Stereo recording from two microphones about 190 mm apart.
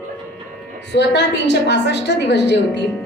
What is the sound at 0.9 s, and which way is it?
A woman's voice, 65° left (ahead or behind).